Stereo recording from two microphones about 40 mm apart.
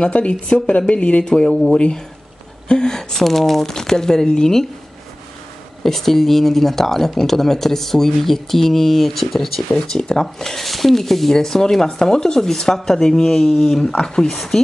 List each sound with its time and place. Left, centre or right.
0.0 s a woman's voice: left
1.2 s speech: centre
1.5 s a woman's voice: left
5.9 s speech: centre
9.7 s speech: centre
10.2 s speech: centre
14.3 s speech: centre